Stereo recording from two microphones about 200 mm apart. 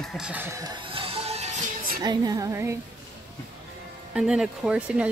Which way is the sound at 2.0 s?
20° right (ahead or behind).